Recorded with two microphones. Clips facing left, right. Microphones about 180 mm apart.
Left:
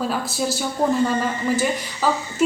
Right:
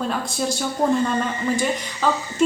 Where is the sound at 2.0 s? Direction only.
5° left (ahead or behind).